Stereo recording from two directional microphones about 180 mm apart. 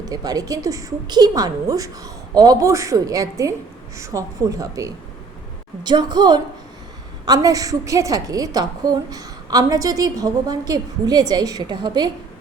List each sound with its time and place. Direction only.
0.1 s a woman's voice: 20° right (ahead or behind)